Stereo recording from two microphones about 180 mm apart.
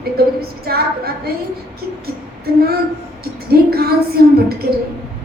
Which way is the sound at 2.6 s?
60° right (ahead or behind).